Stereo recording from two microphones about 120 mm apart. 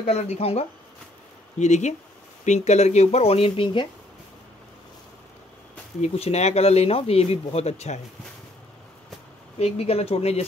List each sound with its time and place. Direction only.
0.0 s speech: 60° left (ahead or behind)
1.6 s speech: 75° left (ahead or behind); by 3.8 s 45° left (ahead or behind)
5.9 s speech: 60° left (ahead or behind)
9.6 s speech: 55° left (ahead or behind)